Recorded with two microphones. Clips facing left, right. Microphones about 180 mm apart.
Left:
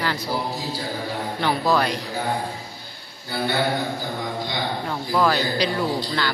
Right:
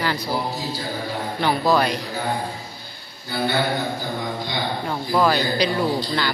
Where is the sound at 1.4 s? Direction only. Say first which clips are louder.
Right 2 dB; 15° right (ahead or behind).